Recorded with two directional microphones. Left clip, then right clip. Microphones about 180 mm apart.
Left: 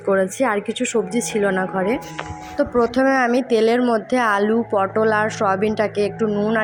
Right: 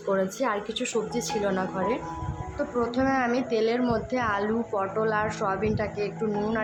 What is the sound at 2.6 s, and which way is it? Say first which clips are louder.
A woman's voice: left 9 dB; 40° left (ahead or behind).